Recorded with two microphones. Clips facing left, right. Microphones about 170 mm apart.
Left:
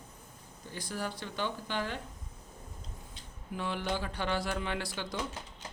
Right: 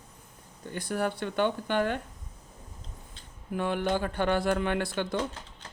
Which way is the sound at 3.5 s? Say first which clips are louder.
Right 6 dB; 55° right (ahead or behind).